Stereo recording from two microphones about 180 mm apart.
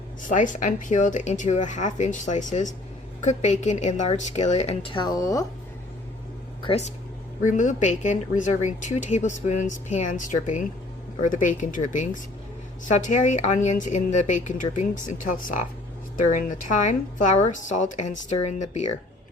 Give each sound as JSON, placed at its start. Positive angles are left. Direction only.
{"t": 0.2, "sound": "a woman's voice", "side_deg": 45}
{"t": 6.6, "sound": "a woman's voice", "side_deg": 35}
{"t": 7.4, "sound": "a woman's voice", "side_deg": 45}